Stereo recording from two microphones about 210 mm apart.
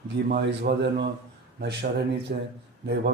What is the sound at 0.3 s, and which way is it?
Speech, 45° right (ahead or behind).